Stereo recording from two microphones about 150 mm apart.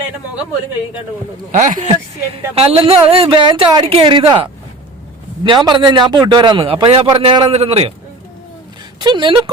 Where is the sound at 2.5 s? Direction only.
40° right (ahead or behind).